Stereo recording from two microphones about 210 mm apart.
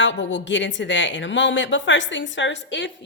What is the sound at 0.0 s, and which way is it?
A woman's voice, 60° left (ahead or behind).